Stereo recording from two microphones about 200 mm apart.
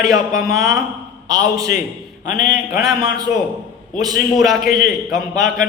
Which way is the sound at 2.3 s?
40° left (ahead or behind).